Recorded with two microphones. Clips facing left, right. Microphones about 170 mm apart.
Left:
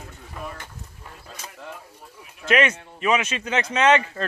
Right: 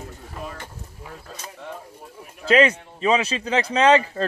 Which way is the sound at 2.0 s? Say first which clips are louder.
Right 4 dB; 50° right (ahead or behind).